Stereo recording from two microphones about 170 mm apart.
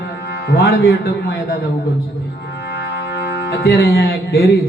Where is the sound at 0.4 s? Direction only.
65° left (ahead or behind).